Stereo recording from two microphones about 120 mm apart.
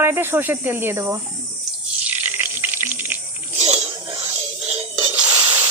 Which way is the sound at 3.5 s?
60° right (ahead or behind).